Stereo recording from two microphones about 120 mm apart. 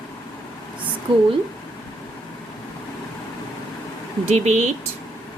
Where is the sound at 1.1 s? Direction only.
45° right (ahead or behind).